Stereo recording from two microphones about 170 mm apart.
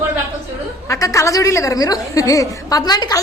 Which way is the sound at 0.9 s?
20° left (ahead or behind).